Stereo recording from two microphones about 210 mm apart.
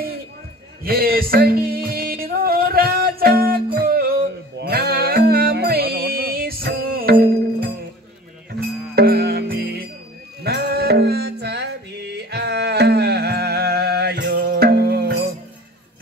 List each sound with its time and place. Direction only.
0.8 s music: 45° right (ahead or behind)
8.9 s music: 50° right (ahead or behind)